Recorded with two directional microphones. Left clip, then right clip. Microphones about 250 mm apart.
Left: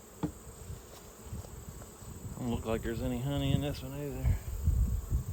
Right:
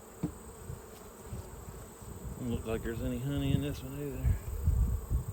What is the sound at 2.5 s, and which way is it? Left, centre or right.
Speech, left.